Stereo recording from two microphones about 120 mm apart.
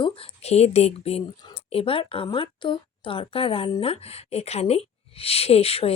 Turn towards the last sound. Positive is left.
turn(degrees=55)  # may be behind; listen again after turning